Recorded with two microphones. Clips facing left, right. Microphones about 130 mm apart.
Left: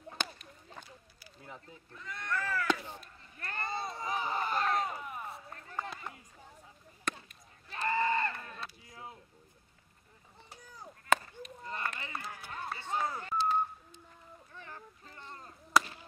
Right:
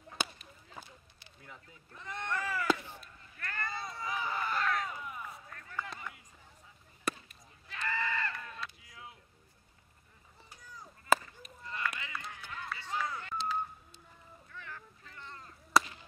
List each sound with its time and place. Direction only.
0.2 s a sound: 5° right (ahead or behind)
1.4 s speech: 30° left (ahead or behind)
2.0 s speech: 20° right (ahead or behind)
3.3 s speech: 25° left (ahead or behind)
4.8 s a sound: 30° left (ahead or behind)
7.1 s basketball bounce: 5° right (ahead or behind)
7.7 s a sound: 35° left (ahead or behind)
11.1 s chop: 5° right (ahead or behind)
11.6 s run: 40° left (ahead or behind)
12.9 s telephone dialing: 25° left (ahead or behind)
14.5 s boat: 30° left (ahead or behind)
15.7 s whip: centre (ahead or behind)